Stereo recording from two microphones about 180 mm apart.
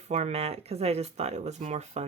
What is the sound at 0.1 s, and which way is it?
Speech, 35° right (ahead or behind).